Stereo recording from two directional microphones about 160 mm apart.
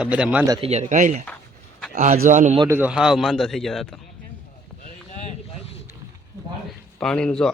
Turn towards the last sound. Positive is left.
turn(degrees=5)  # may be behind; listen again after turning